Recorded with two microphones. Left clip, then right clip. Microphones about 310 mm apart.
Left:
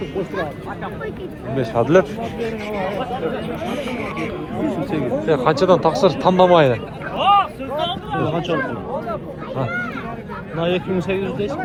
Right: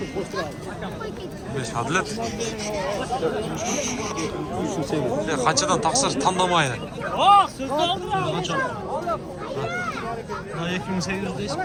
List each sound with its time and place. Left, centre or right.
1.5 s speech: centre
5.2 s speech: centre
7.3 s a sound: right
10.6 s speech: centre
11.1 s speech: right